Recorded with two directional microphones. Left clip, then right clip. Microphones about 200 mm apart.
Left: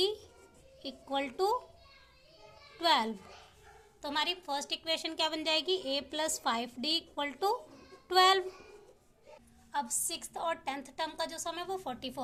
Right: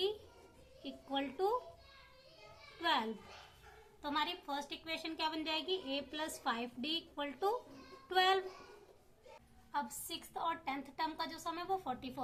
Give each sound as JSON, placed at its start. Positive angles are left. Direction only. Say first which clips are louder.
{"t": 0.8, "sound": "a woman's voice", "louder": "left 5 dB", "side_deg": 50}
{"t": 2.8, "sound": "a woman's voice", "louder": "left 7 dB", "side_deg": 50}
{"t": 8.0, "sound": "child singing", "louder": "left 7 dB", "side_deg": 50}
{"t": 9.7, "sound": "a woman's voice", "louder": "left 5 dB", "side_deg": 40}